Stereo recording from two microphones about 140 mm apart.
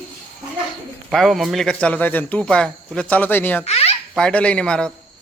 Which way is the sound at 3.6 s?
45° left (ahead or behind).